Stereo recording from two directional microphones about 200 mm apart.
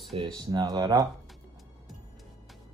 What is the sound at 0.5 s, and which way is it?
Speech, 20° right (ahead or behind).